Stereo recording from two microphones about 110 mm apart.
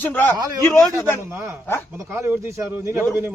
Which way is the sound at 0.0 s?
15° left (ahead or behind).